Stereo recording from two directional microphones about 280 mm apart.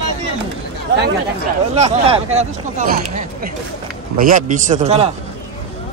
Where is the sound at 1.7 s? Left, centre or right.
Right.